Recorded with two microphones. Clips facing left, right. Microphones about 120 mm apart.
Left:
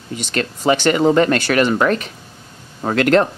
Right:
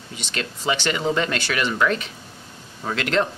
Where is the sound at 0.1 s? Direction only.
50° left (ahead or behind).